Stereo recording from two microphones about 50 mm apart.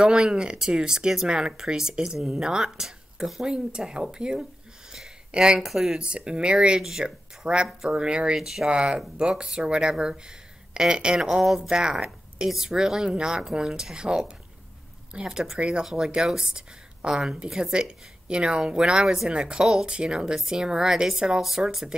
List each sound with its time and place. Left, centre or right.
0.0 s speech: centre
5.6 s speech: centre
5.9 s speech: centre
8.4 s speech: centre
8.6 s speech: centre